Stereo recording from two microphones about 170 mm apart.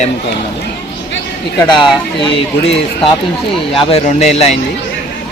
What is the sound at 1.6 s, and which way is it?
A man's voice, 25° left (ahead or behind).